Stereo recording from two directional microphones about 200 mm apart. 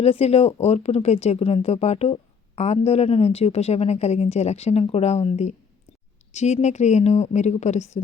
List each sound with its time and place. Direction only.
0.0 s a woman's voice: 30° left (ahead or behind)